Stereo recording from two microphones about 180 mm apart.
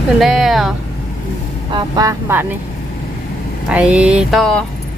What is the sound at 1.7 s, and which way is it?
Speech, 20° right (ahead or behind).